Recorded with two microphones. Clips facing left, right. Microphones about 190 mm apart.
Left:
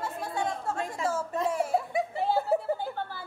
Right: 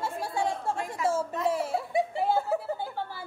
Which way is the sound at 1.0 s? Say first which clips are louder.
Right 3 dB; 25° left (ahead or behind).